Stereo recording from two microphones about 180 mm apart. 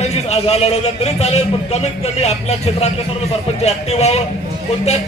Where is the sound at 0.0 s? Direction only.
35° left (ahead or behind).